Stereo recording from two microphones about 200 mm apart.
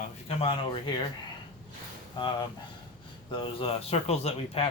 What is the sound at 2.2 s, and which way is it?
Speech, 25° left (ahead or behind).